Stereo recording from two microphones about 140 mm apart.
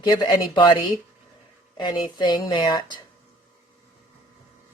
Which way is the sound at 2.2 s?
35° left (ahead or behind).